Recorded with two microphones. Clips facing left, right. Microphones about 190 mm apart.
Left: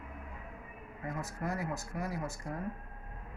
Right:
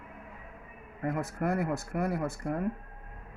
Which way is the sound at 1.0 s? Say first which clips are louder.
Right 7 dB; 60° right (ahead or behind).